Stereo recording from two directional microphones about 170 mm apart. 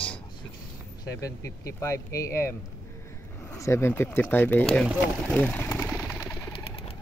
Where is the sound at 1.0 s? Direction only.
20° left (ahead or behind).